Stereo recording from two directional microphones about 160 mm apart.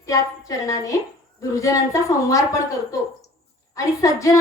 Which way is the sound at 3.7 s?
20° left (ahead or behind).